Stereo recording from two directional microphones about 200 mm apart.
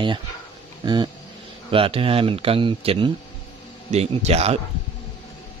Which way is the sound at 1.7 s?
25° right (ahead or behind).